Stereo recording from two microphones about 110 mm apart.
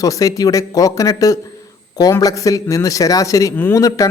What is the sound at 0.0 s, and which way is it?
A man's voice, 30° left (ahead or behind).